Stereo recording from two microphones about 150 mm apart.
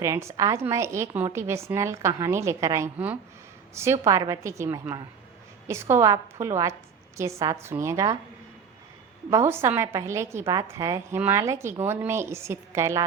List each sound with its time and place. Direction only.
0.0 s a woman's voice: 20° right (ahead or behind)
9.3 s a woman's voice: 15° right (ahead or behind)